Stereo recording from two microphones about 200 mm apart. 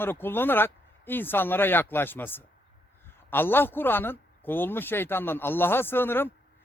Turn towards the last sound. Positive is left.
turn(degrees=10)  # may be behind; listen again after turning